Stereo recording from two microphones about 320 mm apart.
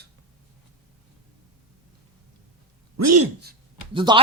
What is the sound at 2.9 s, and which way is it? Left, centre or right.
Speech, right.